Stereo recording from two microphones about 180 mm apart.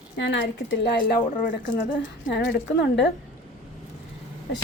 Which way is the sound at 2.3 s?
70° left (ahead or behind).